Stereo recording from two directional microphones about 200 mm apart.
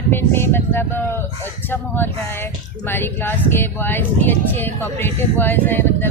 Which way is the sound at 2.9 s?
10° left (ahead or behind).